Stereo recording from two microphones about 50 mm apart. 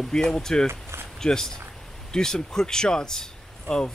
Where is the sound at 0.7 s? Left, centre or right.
Right.